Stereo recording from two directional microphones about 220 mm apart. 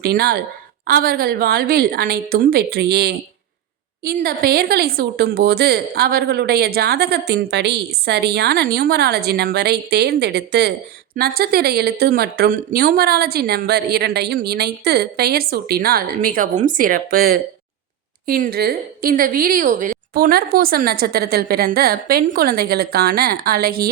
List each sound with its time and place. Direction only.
0.0 s a woman's voice: 45° right (ahead or behind)